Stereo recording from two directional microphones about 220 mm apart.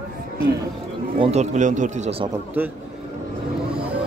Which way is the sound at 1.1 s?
30° right (ahead or behind).